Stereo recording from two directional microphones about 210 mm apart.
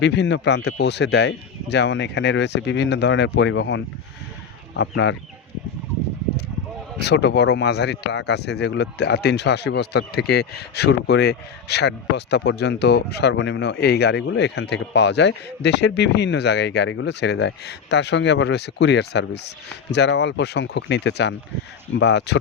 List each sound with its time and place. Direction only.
0.0 s speech: 55° left (ahead or behind)
7.0 s speech: 55° left (ahead or behind)